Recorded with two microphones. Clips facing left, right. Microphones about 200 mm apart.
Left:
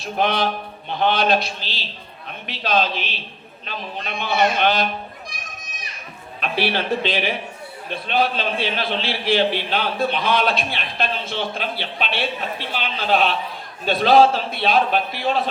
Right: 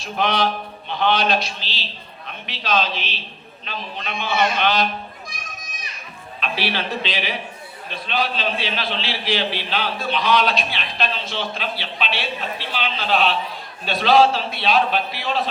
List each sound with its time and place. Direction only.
0.0 s a man's voice: 55° left (ahead or behind)
6.4 s a man's voice: 55° left (ahead or behind)